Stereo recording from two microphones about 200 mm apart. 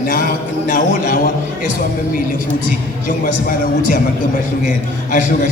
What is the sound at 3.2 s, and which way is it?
Speech, 45° left (ahead or behind).